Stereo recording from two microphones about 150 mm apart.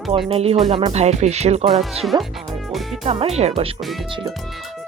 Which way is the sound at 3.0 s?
45° right (ahead or behind).